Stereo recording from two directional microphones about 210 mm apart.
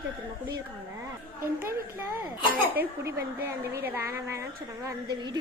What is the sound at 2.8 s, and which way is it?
A woman's voice, 10° right (ahead or behind).